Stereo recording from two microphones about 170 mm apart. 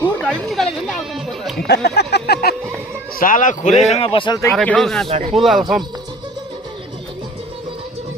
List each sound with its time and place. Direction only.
0.2 s music: 5° left (ahead or behind)
1.5 s speech: 70° left (ahead or behind)
3.2 s speech: 50° left (ahead or behind); by 4.4 s 30° left (ahead or behind)
4.5 s speech: 5° left (ahead or behind)